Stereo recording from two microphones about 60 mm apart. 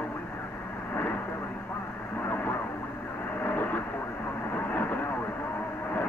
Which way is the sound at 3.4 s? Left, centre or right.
Left.